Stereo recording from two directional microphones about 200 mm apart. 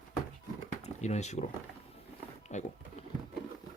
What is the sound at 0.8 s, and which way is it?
Speech, 35° left (ahead or behind).